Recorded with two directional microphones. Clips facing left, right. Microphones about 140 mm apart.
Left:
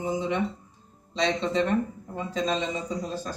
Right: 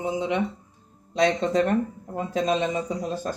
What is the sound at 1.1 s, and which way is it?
Speech, 50° right (ahead or behind).